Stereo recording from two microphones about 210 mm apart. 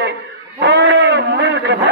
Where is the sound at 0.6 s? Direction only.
55° right (ahead or behind).